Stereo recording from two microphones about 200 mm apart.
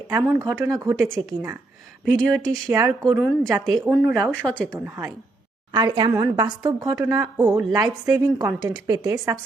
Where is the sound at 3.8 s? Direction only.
10° right (ahead or behind).